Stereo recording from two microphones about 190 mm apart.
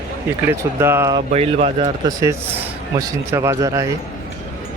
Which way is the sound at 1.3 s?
35° right (ahead or behind).